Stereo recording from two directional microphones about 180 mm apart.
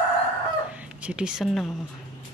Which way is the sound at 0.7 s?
5° right (ahead or behind).